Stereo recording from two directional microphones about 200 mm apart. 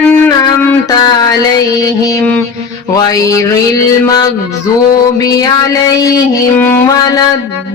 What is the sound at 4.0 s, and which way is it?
Mantra, 20° left (ahead or behind).